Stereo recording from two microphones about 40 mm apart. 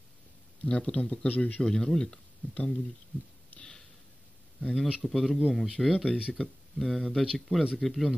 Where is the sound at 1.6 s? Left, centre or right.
Centre.